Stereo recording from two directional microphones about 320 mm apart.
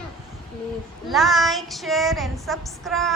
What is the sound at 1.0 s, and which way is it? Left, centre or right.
Child singing, centre.